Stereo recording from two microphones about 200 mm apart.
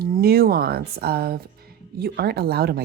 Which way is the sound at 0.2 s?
50° right (ahead or behind).